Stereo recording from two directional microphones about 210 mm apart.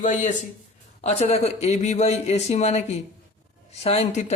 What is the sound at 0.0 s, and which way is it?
A man's voice, 35° left (ahead or behind).